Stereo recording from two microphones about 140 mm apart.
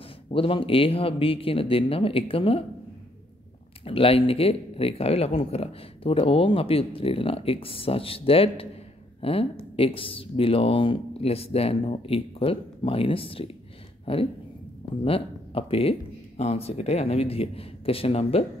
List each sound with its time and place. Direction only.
0.3 s speech: 40° left (ahead or behind)
3.8 s speech: 40° left (ahead or behind)